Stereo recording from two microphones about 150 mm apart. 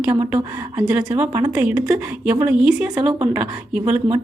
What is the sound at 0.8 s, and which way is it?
A woman's voice, 10° right (ahead or behind).